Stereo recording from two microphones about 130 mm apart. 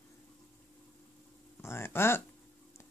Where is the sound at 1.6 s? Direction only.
20° left (ahead or behind).